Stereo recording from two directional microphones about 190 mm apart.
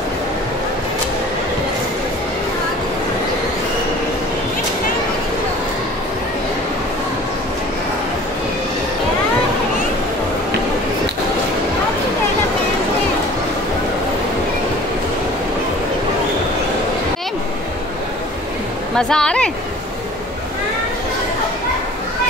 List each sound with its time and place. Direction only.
18.9 s speech: 5° left (ahead or behind)